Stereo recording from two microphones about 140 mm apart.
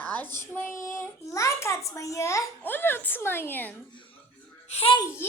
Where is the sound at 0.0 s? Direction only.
10° left (ahead or behind).